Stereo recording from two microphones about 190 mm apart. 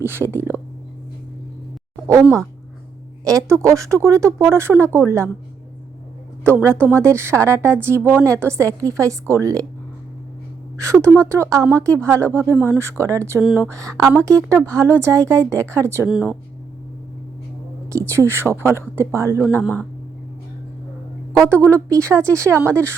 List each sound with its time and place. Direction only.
0.0 s speech: 10° right (ahead or behind)
3.2 s speech: 15° right (ahead or behind)
6.6 s speech: 10° right (ahead or behind)
10.8 s a woman's voice: 15° right (ahead or behind)
12.2 s speech: 10° left (ahead or behind)
12.5 s a woman's voice: 10° right (ahead or behind)
13.7 s speech: 15° right (ahead or behind)
16.0 s a woman's voice: 5° right (ahead or behind)
17.8 s speech: 15° right (ahead or behind)
21.7 s speech: 15° right (ahead or behind)